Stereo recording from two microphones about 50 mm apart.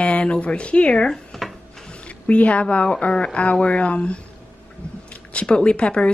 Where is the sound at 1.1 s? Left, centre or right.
Centre.